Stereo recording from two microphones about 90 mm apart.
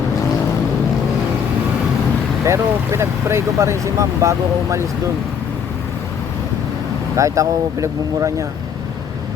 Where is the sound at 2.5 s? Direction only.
30° right (ahead or behind).